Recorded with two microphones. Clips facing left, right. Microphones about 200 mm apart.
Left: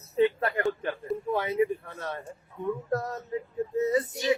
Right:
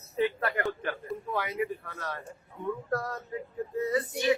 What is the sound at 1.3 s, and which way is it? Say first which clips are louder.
Child singing: left 6 dB; 25° left (ahead or behind).